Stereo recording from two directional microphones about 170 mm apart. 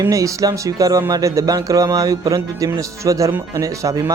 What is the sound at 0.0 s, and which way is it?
Speech, 20° right (ahead or behind).